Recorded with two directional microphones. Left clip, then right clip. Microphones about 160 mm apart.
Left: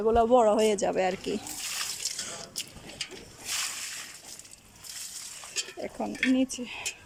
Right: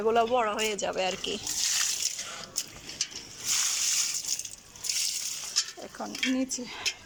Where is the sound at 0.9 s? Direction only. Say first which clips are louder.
Left 2 dB; 25° left (ahead or behind).